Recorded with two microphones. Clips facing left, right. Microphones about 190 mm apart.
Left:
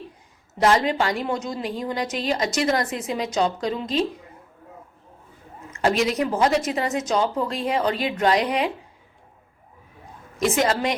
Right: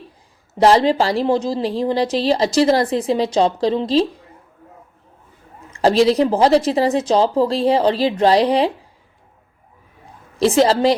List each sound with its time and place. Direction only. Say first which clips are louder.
0.6 s a woman's voice: right 6 dB; 30° right (ahead or behind)
5.7 s a woman's voice: right 8 dB; 30° right (ahead or behind)
10.3 s a woman's voice: right 7 dB; 30° right (ahead or behind)